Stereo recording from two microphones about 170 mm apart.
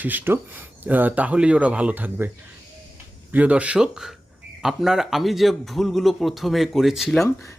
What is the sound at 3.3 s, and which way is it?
Speech, 10° right (ahead or behind).